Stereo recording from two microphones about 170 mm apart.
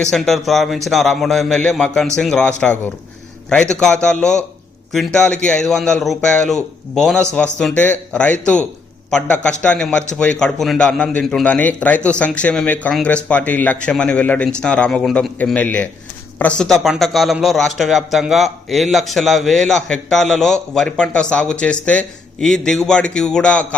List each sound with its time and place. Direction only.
0.1 s a man's voice: centre (ahead or behind)